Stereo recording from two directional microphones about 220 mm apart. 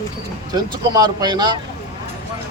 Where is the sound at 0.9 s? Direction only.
20° right (ahead or behind).